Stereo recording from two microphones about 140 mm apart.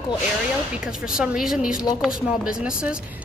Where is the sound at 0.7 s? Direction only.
5° right (ahead or behind).